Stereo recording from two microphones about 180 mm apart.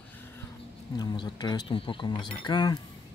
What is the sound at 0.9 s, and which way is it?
Speech, 25° left (ahead or behind).